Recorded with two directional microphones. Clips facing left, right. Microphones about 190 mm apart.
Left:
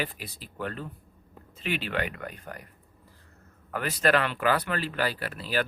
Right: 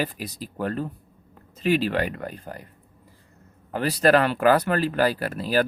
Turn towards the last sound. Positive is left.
turn(degrees=-45)  # may be behind; listen again after turning